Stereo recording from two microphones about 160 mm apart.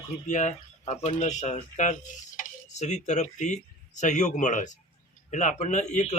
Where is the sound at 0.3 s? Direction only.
45° left (ahead or behind).